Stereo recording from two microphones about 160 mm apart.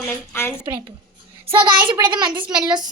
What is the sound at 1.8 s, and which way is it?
A woman's voice, 30° right (ahead or behind).